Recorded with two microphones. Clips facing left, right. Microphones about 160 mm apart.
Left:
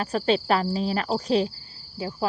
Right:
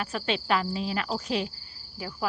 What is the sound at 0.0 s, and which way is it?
A man's voice, 35° left (ahead or behind).